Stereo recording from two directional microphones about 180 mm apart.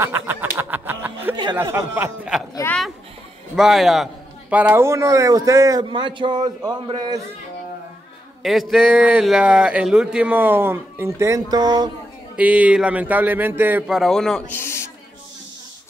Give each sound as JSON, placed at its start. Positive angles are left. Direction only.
{"t": 0.0, "sound": "a sound", "side_deg": -10}
{"t": 1.3, "sound": "a sound", "side_deg": -25}
{"t": 1.6, "sound": "a man's voice", "side_deg": -15}
{"t": 3.5, "sound": "a man's voice", "side_deg": 0}
{"t": 8.4, "sound": "a man's voice", "side_deg": 0}
{"t": 12.4, "sound": "a man's voice", "side_deg": -5}